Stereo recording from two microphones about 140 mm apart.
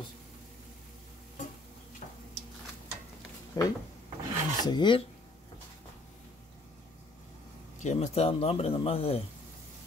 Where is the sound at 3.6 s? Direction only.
25° left (ahead or behind).